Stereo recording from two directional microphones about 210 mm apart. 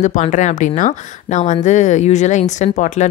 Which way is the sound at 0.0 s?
35° left (ahead or behind).